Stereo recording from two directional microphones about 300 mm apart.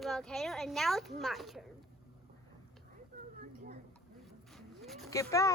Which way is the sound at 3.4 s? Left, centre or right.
Right.